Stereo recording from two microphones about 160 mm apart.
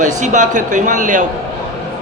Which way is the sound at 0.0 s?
50° right (ahead or behind).